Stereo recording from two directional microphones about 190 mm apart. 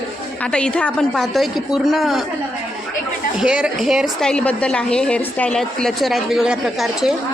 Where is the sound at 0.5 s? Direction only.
5° left (ahead or behind).